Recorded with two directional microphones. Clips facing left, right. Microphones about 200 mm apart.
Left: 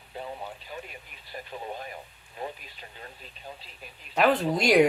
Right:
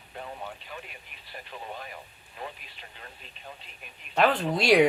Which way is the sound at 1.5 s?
40° left (ahead or behind).